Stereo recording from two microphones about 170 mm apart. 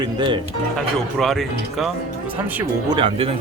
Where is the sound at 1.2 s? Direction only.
Centre (ahead or behind).